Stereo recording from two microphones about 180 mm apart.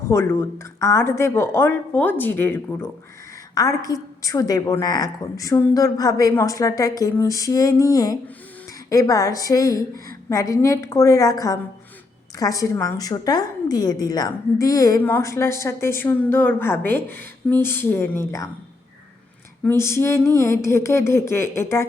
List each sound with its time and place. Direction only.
0.1 s a woman's voice: 15° left (ahead or behind)
19.6 s a woman's voice: 15° left (ahead or behind)